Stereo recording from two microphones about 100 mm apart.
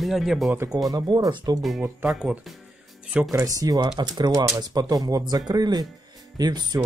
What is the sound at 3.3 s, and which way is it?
Speech, 35° right (ahead or behind).